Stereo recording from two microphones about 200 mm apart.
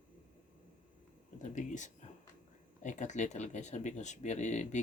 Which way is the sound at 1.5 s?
40° left (ahead or behind).